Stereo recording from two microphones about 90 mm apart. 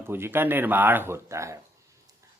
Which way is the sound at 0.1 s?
25° right (ahead or behind).